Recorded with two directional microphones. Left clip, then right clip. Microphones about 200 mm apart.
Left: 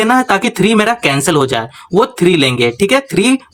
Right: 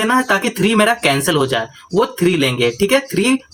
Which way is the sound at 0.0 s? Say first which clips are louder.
Left 4 dB; 30° left (ahead or behind).